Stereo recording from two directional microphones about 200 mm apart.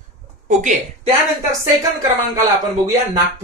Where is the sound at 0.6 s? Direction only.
40° right (ahead or behind).